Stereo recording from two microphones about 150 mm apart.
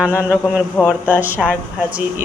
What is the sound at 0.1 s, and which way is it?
Speech, 15° left (ahead or behind).